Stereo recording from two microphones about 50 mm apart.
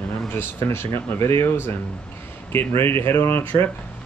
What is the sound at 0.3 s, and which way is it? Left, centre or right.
Speech, left.